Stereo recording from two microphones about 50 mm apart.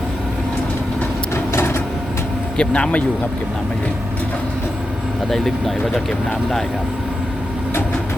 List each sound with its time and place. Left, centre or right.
1.5 s printer: left
2.6 s speech: left
5.3 s speech: centre